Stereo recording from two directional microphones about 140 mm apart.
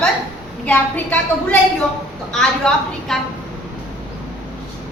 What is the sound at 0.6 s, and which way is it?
Speech, 10° left (ahead or behind).